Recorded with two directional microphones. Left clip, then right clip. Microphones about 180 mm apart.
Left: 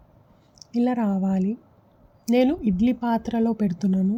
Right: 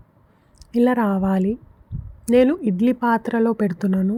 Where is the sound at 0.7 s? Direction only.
40° right (ahead or behind).